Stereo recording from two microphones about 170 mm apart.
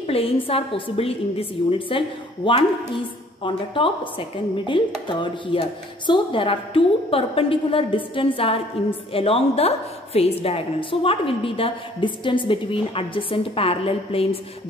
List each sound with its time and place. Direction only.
0.0 s a woman's voice: 35° left (ahead or behind)
5.0 s music: 30° left (ahead or behind)
6.0 s a woman's voice: 30° left (ahead or behind)